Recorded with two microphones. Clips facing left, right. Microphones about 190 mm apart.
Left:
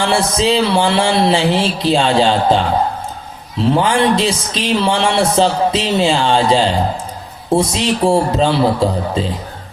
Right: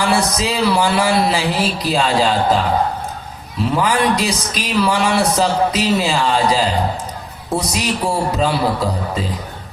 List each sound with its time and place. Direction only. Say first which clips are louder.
0.0 s a man's voice: left 2 dB; 25° left (ahead or behind)
3.8 s a man's voice: left 2 dB; 30° left (ahead or behind)